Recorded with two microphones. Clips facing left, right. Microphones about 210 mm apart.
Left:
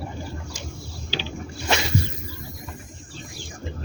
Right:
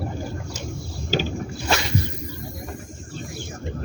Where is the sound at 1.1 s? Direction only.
45° right (ahead or behind).